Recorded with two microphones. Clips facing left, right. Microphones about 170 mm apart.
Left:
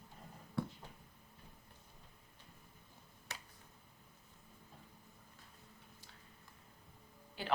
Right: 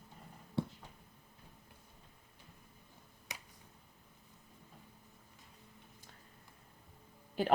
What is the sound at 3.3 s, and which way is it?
Finger snapping, 15° right (ahead or behind).